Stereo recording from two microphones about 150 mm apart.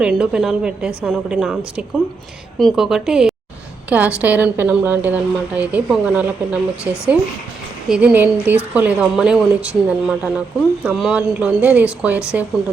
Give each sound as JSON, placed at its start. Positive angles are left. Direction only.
{"t": 0.2, "sound": "a woman's voice", "side_deg": -5}